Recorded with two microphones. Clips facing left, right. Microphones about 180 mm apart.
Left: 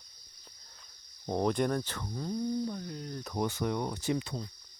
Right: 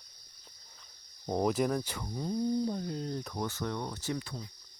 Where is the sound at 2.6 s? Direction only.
25° right (ahead or behind).